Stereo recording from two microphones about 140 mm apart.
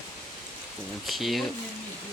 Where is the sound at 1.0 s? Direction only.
Centre (ahead or behind).